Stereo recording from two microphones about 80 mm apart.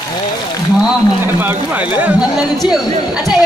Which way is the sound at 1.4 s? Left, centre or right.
Right.